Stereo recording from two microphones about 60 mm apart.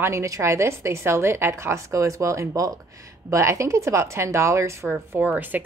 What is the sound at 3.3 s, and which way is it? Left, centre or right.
A woman's voice, right.